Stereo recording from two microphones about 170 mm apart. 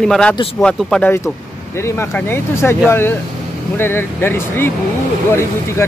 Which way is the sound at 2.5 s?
15° left (ahead or behind).